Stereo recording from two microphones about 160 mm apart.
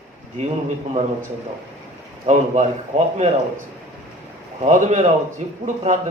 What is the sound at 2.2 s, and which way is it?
A man's voice, 45° right (ahead or behind).